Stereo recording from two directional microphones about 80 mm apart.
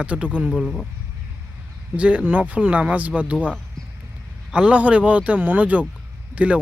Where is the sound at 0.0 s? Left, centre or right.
Centre.